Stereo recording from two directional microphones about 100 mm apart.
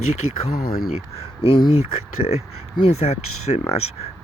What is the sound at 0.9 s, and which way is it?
Speech, 85° left.